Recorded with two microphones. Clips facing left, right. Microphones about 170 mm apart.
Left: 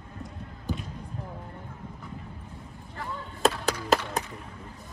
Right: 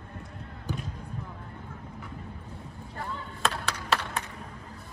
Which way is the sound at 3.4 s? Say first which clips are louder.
Left 6 dB; 40° left (ahead or behind).